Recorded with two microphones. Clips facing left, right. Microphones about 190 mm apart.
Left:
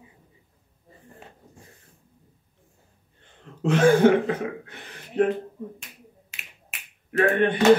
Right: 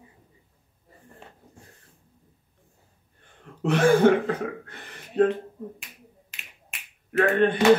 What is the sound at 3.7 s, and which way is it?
Speech, 15° left (ahead or behind).